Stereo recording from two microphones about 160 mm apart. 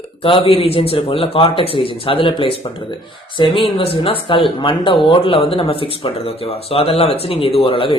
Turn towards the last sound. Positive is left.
turn(degrees=35)  # may be behind; listen again after turning